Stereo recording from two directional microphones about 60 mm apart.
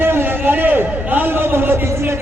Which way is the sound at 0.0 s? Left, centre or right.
Right.